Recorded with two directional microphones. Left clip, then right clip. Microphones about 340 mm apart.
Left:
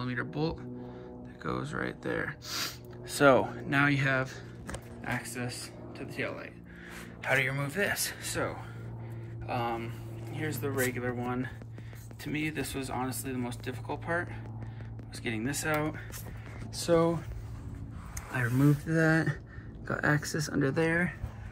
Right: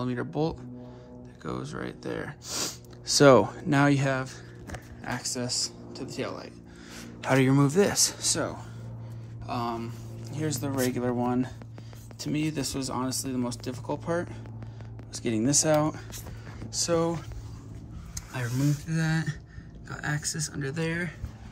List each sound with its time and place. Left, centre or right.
0.0 s speech: centre
18.3 s speech: centre
19.9 s speech: centre
20.8 s speech: centre